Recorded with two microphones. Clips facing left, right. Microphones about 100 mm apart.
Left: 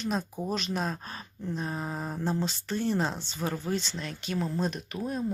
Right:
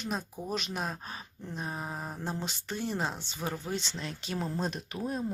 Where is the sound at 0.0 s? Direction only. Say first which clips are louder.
Left 5 dB; 5° right (ahead or behind).